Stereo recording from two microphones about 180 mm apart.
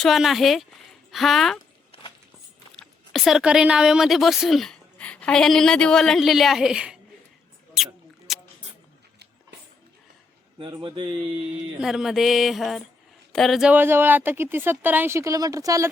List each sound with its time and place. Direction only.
0.0 s music: centre (ahead or behind)
2.7 s speech: centre (ahead or behind)
7.8 s a sound: centre (ahead or behind)
10.6 s speech: 25° right (ahead or behind)
11.8 s music: centre (ahead or behind)
13.3 s speech: centre (ahead or behind); by 15.9 s 20° right (ahead or behind)